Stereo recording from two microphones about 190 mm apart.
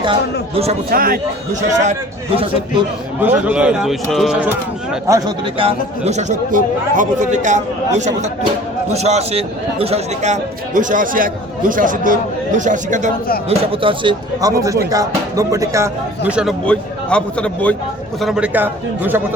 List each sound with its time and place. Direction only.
0.0 s a man's voice: 30° right (ahead or behind)
0.9 s a man's voice: 50° right (ahead or behind)
1.8 s speech: 35° right (ahead or behind)
3.4 s speech: 5° right (ahead or behind)
5.0 s a man's voice: 15° right (ahead or behind)
5.5 s a man's voice: 30° right (ahead or behind)
13.5 s a man's voice: 30° right (ahead or behind); by 19.2 s 10° right (ahead or behind)